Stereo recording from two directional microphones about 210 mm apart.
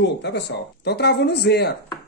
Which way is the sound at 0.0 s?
55° left (ahead or behind).